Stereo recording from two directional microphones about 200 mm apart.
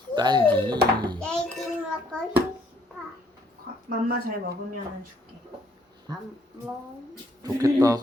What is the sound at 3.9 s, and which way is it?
Speech, 50° right (ahead or behind).